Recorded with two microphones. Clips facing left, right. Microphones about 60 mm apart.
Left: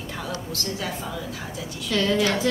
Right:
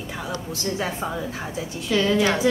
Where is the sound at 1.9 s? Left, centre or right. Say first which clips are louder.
Right 2 dB; centre.